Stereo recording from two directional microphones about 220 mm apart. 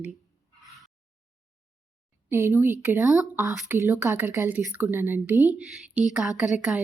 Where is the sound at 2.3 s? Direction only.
10° right (ahead or behind).